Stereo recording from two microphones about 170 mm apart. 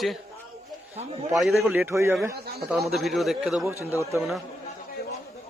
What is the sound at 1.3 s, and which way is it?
Speech, centre (ahead or behind).